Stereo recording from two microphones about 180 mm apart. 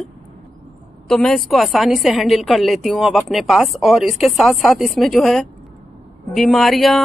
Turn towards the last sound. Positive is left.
turn(degrees=0)  # may be behind; listen again after turning